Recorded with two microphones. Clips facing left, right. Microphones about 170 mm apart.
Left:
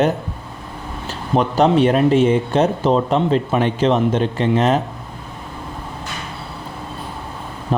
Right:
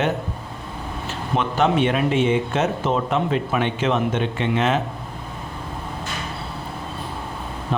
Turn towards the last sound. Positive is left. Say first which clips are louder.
# left 4 dB
turn(degrees=40)  # may be behind; listen again after turning